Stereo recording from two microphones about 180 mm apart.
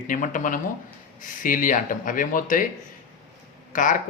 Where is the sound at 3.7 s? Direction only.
45° left (ahead or behind).